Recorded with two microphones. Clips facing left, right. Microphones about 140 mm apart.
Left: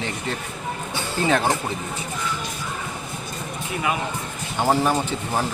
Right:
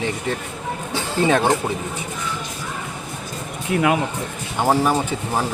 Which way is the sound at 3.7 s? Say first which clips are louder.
Right 10 dB; 80° right.